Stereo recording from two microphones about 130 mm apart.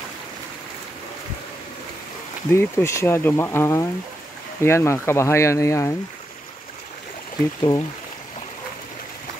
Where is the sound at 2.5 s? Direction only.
20° left (ahead or behind).